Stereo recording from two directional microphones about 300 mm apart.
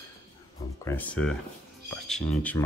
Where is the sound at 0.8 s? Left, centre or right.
Centre.